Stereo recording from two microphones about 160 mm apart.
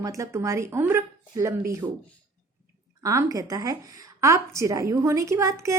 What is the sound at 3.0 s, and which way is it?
A woman's voice, 20° right (ahead or behind).